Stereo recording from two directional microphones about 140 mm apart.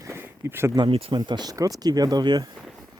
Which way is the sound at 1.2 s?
30° right (ahead or behind).